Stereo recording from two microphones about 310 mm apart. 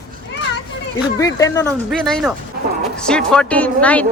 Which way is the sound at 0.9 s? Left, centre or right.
Centre.